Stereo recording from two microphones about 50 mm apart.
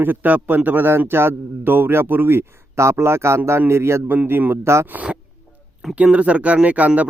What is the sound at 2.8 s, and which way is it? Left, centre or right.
A man's voice, right.